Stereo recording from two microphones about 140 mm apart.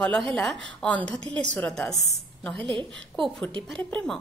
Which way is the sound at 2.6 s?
35° right (ahead or behind).